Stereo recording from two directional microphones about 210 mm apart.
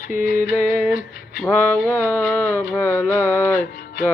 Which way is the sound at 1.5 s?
5° left (ahead or behind).